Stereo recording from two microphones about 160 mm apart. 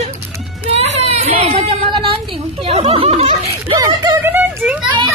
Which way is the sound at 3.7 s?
20° right (ahead or behind).